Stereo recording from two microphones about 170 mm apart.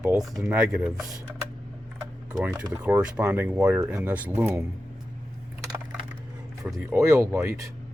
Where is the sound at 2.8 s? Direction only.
10° right (ahead or behind).